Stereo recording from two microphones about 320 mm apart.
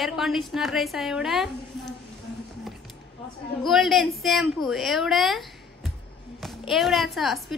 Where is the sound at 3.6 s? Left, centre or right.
Centre.